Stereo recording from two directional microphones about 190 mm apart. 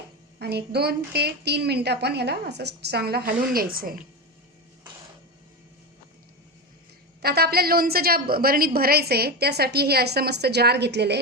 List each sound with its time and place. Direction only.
0.3 s a woman's voice: 60° right (ahead or behind)
7.2 s a woman's voice: 55° right (ahead or behind)